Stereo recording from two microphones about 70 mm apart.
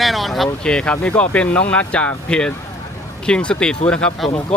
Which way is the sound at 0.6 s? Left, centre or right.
Centre.